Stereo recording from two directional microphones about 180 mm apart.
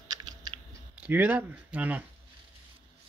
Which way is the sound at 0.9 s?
10° right (ahead or behind).